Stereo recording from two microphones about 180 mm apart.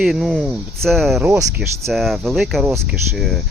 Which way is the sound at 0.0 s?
Centre (ahead or behind).